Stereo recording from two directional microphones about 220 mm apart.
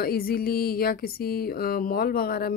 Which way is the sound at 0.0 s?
45° left (ahead or behind).